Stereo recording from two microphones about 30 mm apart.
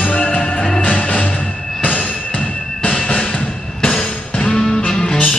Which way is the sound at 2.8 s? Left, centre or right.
Left.